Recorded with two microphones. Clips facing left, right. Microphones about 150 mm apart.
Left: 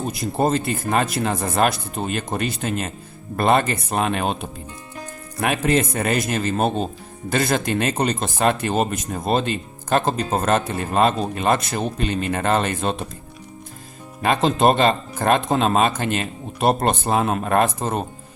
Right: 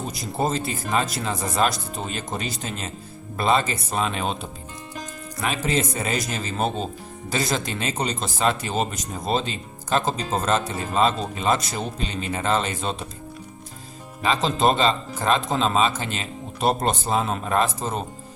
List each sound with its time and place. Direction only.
0.1 s speech: 55° left (ahead or behind)
14.2 s speech: 55° left (ahead or behind)